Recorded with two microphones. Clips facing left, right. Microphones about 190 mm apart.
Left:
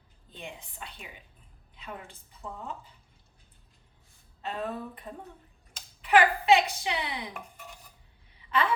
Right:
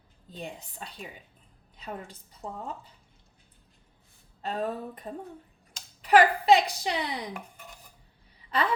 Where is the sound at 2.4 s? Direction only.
40° right (ahead or behind).